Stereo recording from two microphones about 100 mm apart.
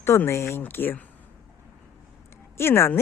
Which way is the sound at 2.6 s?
25° left (ahead or behind).